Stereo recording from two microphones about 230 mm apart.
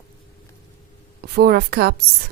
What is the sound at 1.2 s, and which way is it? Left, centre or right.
Speech, right.